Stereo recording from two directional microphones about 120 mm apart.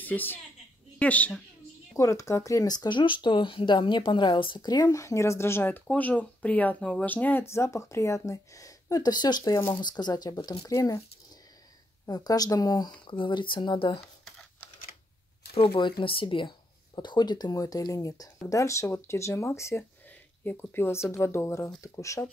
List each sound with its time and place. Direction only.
0.0 s a woman's voice: 15° left (ahead or behind)
2.0 s speech: 25° left (ahead or behind)
12.1 s speech: 30° left (ahead or behind)
15.5 s speech: 50° left (ahead or behind); by 22.2 s 25° left (ahead or behind)